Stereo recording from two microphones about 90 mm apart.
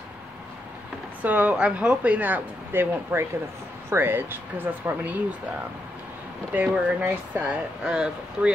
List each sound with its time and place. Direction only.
1.2 s speech: 15° right (ahead or behind)
6.5 s speech: 20° right (ahead or behind)